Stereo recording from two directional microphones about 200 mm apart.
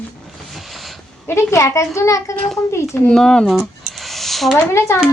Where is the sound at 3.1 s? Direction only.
5° left (ahead or behind).